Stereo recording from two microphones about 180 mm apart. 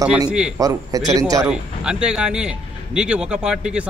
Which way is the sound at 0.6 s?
20° right (ahead or behind).